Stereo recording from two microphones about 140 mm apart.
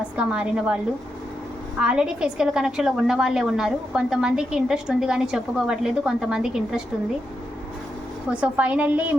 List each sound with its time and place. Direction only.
0.2 s a woman's voice: 5° right (ahead or behind)
1.8 s a woman's voice: 5° right (ahead or behind)
8.3 s a woman's voice: 10° right (ahead or behind)